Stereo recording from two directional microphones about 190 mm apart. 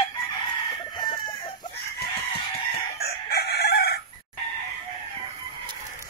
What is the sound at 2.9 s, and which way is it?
Chicken, 55° left (ahead or behind).